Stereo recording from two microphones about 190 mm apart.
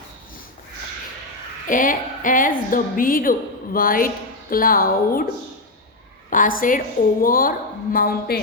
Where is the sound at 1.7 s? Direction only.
45° left (ahead or behind).